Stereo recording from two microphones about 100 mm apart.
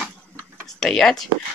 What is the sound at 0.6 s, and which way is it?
Speech, 5° left (ahead or behind).